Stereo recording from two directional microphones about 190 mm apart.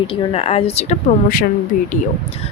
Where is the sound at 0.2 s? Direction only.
30° left (ahead or behind).